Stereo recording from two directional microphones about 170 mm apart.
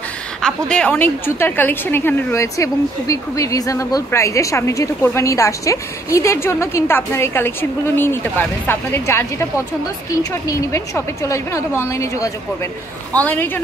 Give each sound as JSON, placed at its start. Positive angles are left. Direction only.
{"t": 0.4, "sound": "a woman's voice", "side_deg": 5}